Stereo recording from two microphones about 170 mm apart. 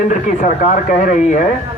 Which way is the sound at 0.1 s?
50° left (ahead or behind).